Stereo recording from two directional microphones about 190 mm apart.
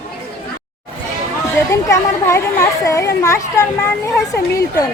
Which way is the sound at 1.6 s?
15° left (ahead or behind).